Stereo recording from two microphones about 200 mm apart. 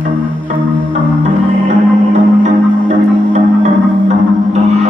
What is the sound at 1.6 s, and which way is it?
Music, 40° right (ahead or behind).